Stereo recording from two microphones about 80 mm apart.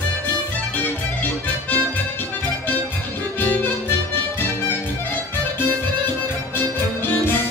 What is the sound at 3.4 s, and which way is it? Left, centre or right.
Music, left.